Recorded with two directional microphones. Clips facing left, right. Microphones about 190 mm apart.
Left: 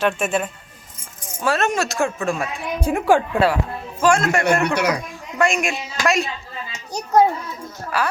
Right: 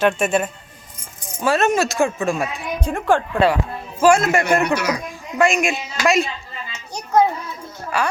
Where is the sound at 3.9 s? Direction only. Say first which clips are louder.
Right 3 dB; 5° right (ahead or behind).